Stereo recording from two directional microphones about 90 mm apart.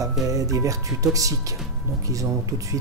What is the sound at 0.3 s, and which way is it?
Speech, 40° right (ahead or behind).